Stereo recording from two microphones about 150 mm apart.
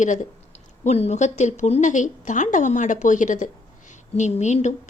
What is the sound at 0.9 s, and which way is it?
A woman's voice, 45° left (ahead or behind).